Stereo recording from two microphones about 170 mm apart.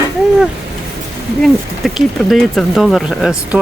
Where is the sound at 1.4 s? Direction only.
Centre (ahead or behind).